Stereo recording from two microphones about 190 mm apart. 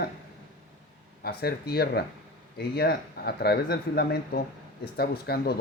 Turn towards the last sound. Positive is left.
turn(degrees=55)  # may be behind; listen again after turning